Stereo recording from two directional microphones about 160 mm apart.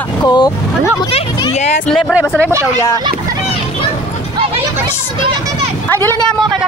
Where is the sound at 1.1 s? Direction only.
45° left (ahead or behind).